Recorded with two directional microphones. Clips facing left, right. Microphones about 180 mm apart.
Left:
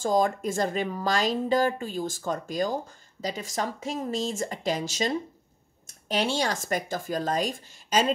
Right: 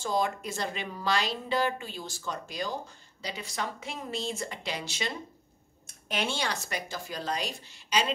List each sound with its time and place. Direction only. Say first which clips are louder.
0.0 s speech: left 6 dB; 45° left (ahead or behind)